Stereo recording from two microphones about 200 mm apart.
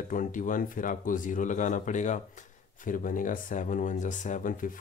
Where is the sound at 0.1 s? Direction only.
40° left (ahead or behind).